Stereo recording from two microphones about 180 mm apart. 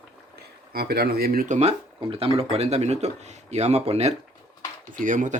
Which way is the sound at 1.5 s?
35° right (ahead or behind).